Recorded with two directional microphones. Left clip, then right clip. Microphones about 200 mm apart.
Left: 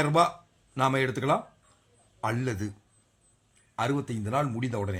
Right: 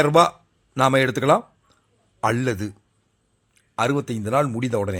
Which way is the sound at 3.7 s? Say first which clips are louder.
Right 7 dB; 30° right (ahead or behind).